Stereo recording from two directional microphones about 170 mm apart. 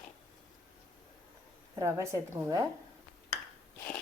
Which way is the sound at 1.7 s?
15° right (ahead or behind).